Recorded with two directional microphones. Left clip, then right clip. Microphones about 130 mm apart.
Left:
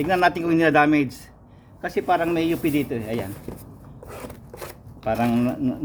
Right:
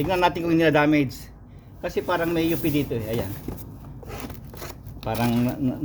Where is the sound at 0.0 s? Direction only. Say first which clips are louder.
Left 2 dB; 35° left (ahead or behind).